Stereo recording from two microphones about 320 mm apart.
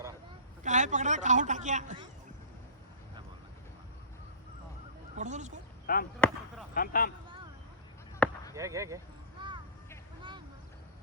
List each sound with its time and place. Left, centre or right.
0.6 s a man's voice: right
5.1 s speech: right
5.8 s speech: left
6.1 s basketball bounce: centre
6.7 s speech: left
8.2 s basketball bounce: centre
8.5 s speech: centre